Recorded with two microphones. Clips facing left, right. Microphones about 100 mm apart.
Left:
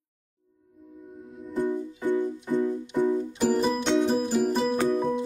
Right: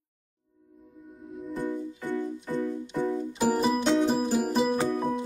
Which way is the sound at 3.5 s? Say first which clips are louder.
Even; 5° right (ahead or behind).